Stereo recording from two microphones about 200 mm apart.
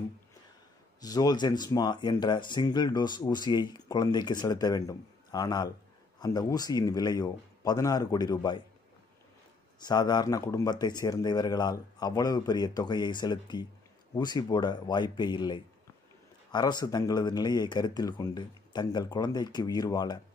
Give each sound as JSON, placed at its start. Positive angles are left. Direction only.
{"t": 1.0, "sound": "speech", "side_deg": 20}
{"t": 9.8, "sound": "speech", "side_deg": 20}